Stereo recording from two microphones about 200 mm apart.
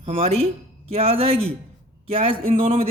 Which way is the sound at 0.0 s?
30° right (ahead or behind).